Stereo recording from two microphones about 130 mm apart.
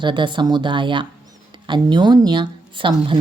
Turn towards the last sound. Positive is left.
turn(degrees=-40)  # may be behind; listen again after turning